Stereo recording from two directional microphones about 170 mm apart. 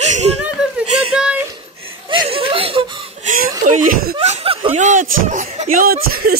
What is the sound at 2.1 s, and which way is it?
Chuckle, 30° right (ahead or behind).